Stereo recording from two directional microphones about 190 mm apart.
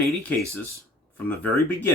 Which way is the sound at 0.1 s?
10° left (ahead or behind).